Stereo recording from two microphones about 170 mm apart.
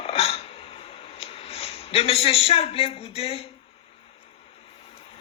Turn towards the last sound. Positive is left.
turn(degrees=35)  # may be behind; listen again after turning